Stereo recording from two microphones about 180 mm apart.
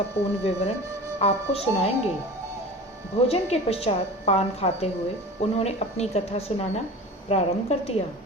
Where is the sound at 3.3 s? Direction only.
35° left (ahead or behind).